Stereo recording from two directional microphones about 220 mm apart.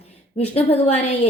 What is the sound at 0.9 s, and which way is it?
Speech, 30° left (ahead or behind).